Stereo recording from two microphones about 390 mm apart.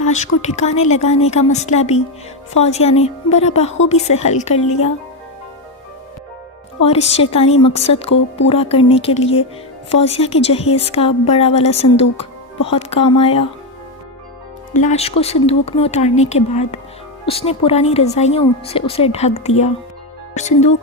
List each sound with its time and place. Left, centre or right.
0.0 s a woman's voice: centre
7.1 s a woman's voice: centre
14.7 s a woman's voice: centre